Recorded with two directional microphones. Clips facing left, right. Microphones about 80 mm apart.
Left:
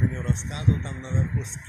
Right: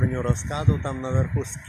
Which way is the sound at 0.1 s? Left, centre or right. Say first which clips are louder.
Right 5 dB; right.